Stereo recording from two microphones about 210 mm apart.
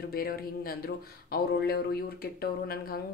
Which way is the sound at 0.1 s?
45° left (ahead or behind).